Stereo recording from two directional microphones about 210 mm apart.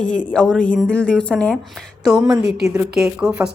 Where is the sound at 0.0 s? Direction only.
5° left (ahead or behind).